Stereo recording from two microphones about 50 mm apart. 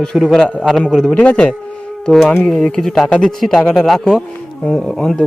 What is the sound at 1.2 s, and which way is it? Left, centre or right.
Speech, left.